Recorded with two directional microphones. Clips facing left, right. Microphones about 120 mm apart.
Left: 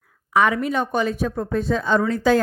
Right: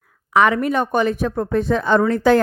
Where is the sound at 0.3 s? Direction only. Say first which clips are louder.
Right 3 dB; 60° right (ahead or behind).